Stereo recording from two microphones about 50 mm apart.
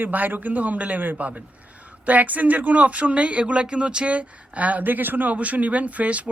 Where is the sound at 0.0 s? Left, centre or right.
Right.